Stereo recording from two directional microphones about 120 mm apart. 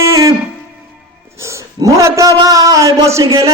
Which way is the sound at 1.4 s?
25° right (ahead or behind).